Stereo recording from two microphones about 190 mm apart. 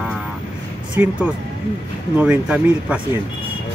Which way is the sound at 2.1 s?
5° right (ahead or behind).